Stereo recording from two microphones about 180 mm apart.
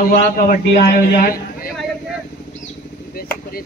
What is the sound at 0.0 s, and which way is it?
A man's voice, 55° left (ahead or behind).